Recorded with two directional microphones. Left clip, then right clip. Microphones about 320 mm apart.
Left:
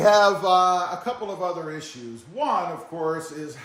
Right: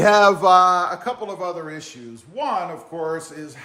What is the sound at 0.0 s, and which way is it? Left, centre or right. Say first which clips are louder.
Speech: right 3 dB; right.